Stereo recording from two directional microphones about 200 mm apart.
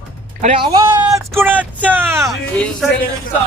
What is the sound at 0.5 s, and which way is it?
Speech, 20° right (ahead or behind).